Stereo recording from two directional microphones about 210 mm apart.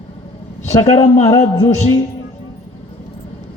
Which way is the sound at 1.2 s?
20° left (ahead or behind).